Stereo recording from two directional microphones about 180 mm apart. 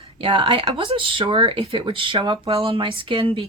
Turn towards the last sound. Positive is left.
turn(degrees=-30)  # may be behind; listen again after turning